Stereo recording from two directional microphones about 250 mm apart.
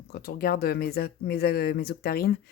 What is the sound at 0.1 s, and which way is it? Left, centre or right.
Speech, left.